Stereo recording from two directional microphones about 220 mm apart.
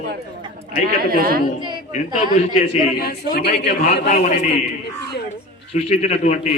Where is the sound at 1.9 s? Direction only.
30° left (ahead or behind).